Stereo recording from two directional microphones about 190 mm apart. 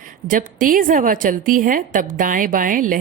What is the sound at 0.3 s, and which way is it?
Speech, 45° right (ahead or behind).